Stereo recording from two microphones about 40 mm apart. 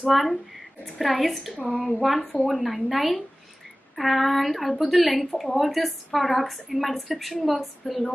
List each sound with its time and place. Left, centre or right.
0.1 s a woman's voice: centre